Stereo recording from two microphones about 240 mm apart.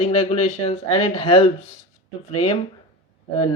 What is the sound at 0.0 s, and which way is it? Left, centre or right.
Speech, left.